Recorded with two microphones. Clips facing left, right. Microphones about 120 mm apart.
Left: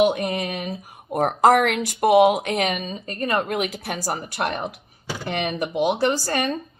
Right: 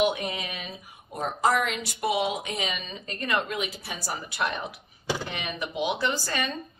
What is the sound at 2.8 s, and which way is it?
Speech, 40° left (ahead or behind).